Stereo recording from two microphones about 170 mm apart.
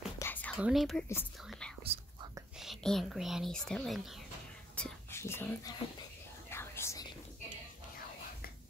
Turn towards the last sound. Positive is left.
turn(degrees=20)  # may be behind; listen again after turning